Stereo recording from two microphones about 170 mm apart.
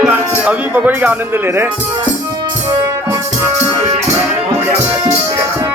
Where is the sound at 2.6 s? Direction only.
25° right (ahead or behind).